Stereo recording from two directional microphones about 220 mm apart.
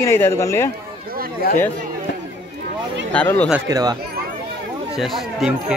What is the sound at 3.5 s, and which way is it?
Speech, 15° right (ahead or behind).